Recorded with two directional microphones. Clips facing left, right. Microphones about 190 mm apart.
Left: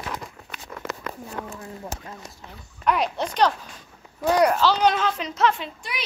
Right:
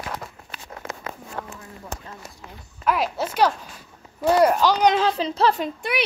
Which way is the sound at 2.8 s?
5° right (ahead or behind).